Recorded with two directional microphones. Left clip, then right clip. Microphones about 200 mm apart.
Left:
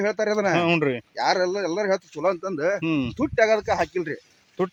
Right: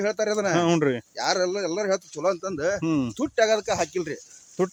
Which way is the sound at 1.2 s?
35° left (ahead or behind).